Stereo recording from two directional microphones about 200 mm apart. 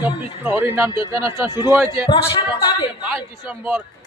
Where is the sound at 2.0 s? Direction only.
25° left (ahead or behind).